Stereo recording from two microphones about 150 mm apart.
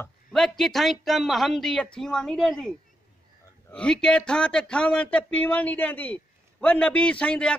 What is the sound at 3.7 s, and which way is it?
Speech, 5° left (ahead or behind).